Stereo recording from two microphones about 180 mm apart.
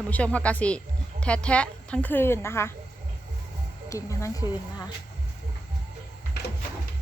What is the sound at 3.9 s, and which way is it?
Speech, 15° left (ahead or behind).